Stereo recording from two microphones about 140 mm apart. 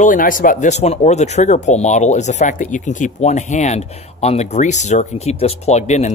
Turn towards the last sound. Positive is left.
turn(degrees=55)  # may be behind; listen again after turning